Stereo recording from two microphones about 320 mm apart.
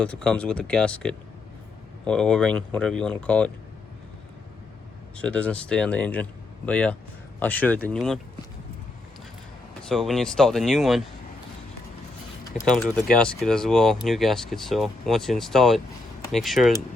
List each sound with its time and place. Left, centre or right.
0.0 s speech: centre
5.1 s speech: centre
9.9 s speech: centre
12.7 s speech: centre